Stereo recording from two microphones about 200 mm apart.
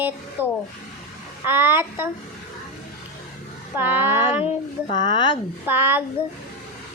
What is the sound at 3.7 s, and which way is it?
Speech, 10° right (ahead or behind).